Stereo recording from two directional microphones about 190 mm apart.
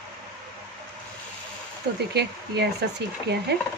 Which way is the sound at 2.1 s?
60° right (ahead or behind).